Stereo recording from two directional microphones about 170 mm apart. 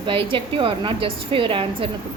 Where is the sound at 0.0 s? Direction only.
30° right (ahead or behind).